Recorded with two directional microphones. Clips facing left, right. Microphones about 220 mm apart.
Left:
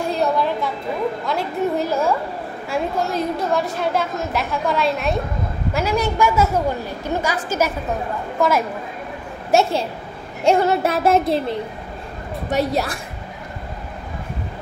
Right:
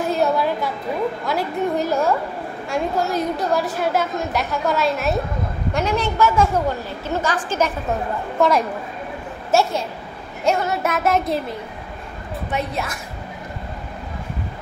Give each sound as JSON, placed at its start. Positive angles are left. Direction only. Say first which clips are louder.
{"t": 0.0, "sound": "a sound", "louder": "right 1 dB", "side_deg": -5}
{"t": 1.2, "sound": "a woman's voice", "louder": "even", "side_deg": 0}
{"t": 9.5, "sound": "a woman's voice", "louder": "left 1 dB", "side_deg": 15}
{"t": 10.4, "sound": "a woman's voice", "louder": "left 4 dB", "side_deg": 30}
{"t": 12.4, "sound": "a woman's voice", "louder": "left 6 dB", "side_deg": 40}